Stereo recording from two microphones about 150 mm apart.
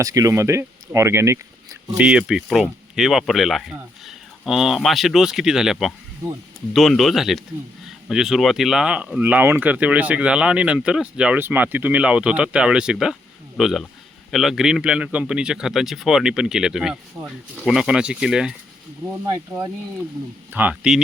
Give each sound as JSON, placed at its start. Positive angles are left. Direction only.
{"t": 0.0, "sound": "speech", "side_deg": -20}
{"t": 2.0, "sound": "speech", "side_deg": -5}
{"t": 19.2, "sound": "speech", "side_deg": -25}
{"t": 20.5, "sound": "speech", "side_deg": -10}